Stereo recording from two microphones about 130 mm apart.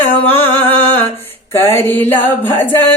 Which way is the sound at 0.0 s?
15° left (ahead or behind).